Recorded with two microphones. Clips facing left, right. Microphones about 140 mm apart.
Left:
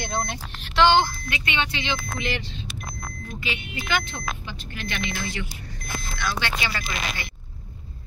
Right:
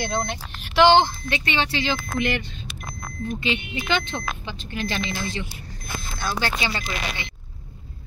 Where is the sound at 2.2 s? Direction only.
55° right (ahead or behind).